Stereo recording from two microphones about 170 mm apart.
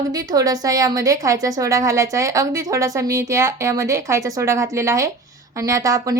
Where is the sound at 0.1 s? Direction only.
20° right (ahead or behind).